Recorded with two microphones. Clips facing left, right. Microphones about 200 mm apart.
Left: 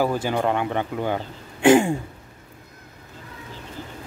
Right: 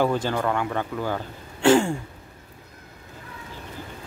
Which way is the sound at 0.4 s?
20° left (ahead or behind).